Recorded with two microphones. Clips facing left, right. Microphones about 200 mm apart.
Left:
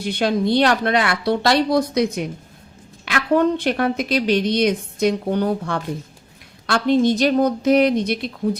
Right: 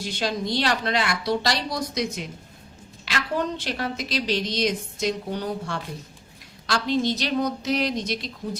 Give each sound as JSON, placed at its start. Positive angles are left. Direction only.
{"t": 0.0, "sound": "a woman's voice", "side_deg": 60}